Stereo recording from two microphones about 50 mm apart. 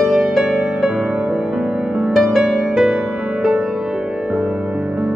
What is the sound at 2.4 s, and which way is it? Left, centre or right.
Music, centre.